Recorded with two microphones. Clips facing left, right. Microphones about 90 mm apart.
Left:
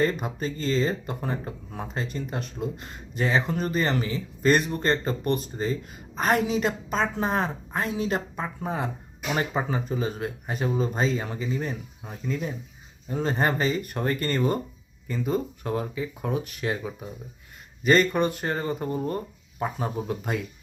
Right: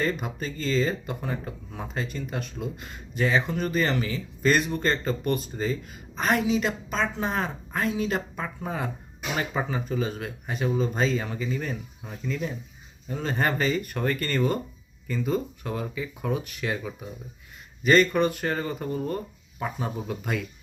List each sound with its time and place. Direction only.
0.0 s speech: 35° left (ahead or behind)